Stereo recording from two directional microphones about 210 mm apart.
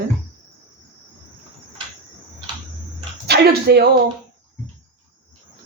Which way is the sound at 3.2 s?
50° right (ahead or behind).